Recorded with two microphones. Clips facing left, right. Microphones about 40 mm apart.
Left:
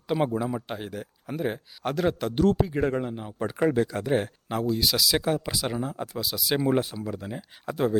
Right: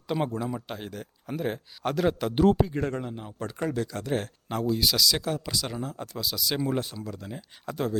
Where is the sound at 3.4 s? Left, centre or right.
Left.